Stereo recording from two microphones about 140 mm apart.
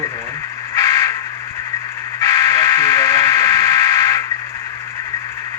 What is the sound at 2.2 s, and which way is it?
Buzzer, 20° left (ahead or behind).